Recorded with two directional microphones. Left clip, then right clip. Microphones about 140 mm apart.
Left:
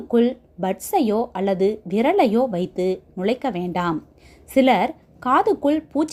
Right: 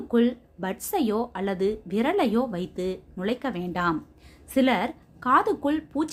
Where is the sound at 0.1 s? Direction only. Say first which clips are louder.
Left 5 dB; 25° left (ahead or behind).